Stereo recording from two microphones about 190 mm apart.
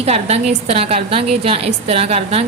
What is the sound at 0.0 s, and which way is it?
A woman's voice, 35° right (ahead or behind).